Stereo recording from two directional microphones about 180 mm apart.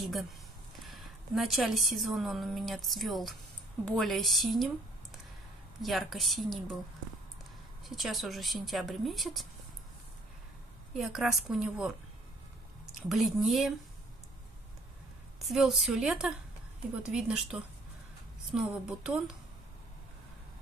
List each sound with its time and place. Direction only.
0.0 s a woman's voice: centre (ahead or behind)
5.8 s speech: centre (ahead or behind)
7.9 s speech: centre (ahead or behind)
10.9 s speech: centre (ahead or behind)
13.1 s speech: centre (ahead or behind)
15.3 s speech: centre (ahead or behind)